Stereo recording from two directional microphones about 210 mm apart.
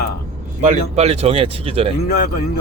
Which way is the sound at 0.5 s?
35° right (ahead or behind).